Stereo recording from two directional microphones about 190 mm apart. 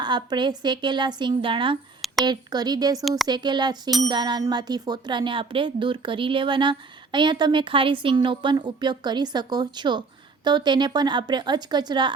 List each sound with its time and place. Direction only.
0.0 s speech: 25° right (ahead or behind)
3.0 s speech: centre (ahead or behind)
3.2 s speech: 25° right (ahead or behind)